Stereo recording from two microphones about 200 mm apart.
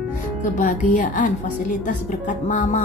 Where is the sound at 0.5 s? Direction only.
40° left (ahead or behind).